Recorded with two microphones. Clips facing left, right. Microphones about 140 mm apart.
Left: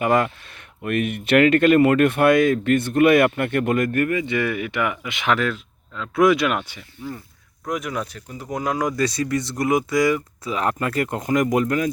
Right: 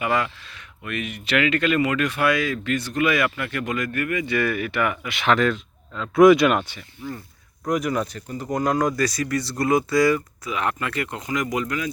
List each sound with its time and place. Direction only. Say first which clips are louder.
0.0 s speech: left 4 dB; 45° left (ahead or behind)
4.1 s speech: left 1 dB; 25° left (ahead or behind)
5.3 s speech: right 2 dB; 5° left (ahead or behind)
7.6 s speech: right 3 dB; centre (ahead or behind)
9.0 s speech: left 2 dB; 25° left (ahead or behind)
10.4 s speech: left 3 dB; 35° left (ahead or behind)